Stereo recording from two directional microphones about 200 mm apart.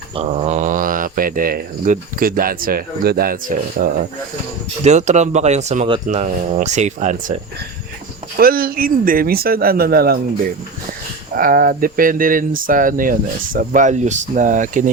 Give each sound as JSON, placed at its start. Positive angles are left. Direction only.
{"t": 0.1, "sound": "speech", "side_deg": -30}
{"t": 8.4, "sound": "speech", "side_deg": -45}
{"t": 11.3, "sound": "speech", "side_deg": -45}